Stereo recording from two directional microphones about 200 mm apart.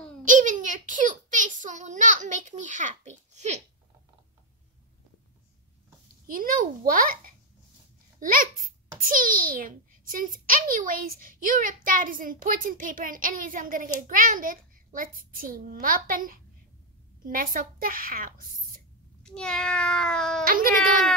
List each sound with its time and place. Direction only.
0.2 s a child's voice: 40° right (ahead or behind)
6.2 s a child's voice: 45° right (ahead or behind)
19.2 s speech: 5° left (ahead or behind)
20.4 s a child's voice: 45° right (ahead or behind)